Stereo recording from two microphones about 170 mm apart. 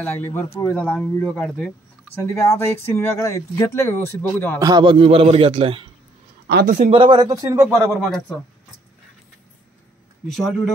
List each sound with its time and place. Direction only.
0.0 s speech: 15° left (ahead or behind)
2.1 s speech: 15° left (ahead or behind)
4.6 s a man's voice: 25° right (ahead or behind)
6.6 s speech: 50° right (ahead or behind)
6.9 s speech: 30° right (ahead or behind)
7.7 s speech: 5° right (ahead or behind)
10.2 s speech: centre (ahead or behind)